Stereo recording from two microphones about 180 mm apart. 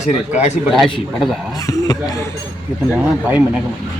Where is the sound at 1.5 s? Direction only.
20° left (ahead or behind).